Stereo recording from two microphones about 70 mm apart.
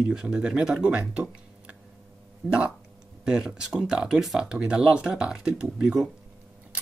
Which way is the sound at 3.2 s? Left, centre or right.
Centre.